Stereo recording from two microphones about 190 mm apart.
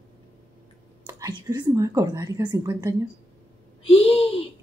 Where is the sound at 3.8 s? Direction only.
30° left (ahead or behind).